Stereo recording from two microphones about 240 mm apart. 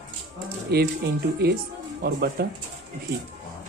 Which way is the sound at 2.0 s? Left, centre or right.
Right.